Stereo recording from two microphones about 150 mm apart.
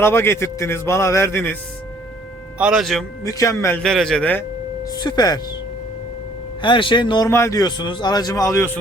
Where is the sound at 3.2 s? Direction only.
20° left (ahead or behind).